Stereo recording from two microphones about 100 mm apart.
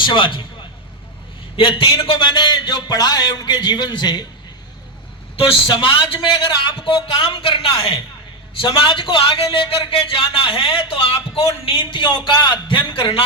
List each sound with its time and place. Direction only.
0.1 s a man's voice: 55° left (ahead or behind)
1.5 s a man's voice: 60° left (ahead or behind); by 4.3 s 45° left (ahead or behind)
5.6 s a man's voice: 60° left (ahead or behind)